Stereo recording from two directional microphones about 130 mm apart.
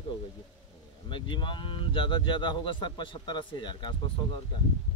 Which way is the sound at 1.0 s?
40° left (ahead or behind).